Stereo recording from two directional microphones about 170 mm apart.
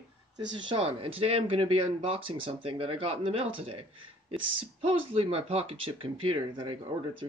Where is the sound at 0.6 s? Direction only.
30° right (ahead or behind).